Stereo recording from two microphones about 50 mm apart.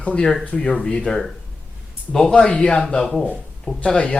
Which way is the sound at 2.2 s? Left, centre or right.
Left.